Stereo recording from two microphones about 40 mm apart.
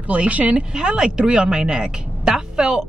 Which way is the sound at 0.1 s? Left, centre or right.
Right.